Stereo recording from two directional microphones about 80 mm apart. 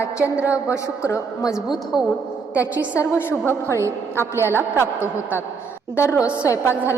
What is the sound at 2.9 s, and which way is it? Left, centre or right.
Speech, left.